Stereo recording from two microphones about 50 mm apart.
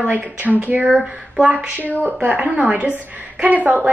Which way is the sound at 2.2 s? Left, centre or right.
Right.